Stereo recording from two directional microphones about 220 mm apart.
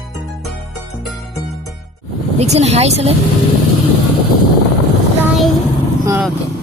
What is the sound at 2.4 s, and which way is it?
Speech, 30° right (ahead or behind).